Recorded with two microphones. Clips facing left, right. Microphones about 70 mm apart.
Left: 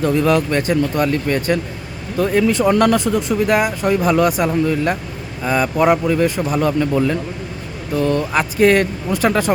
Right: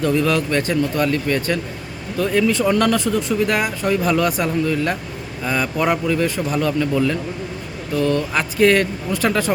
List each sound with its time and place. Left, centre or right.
0.0 s speech: left
6.6 s speech: left
8.3 s speech: centre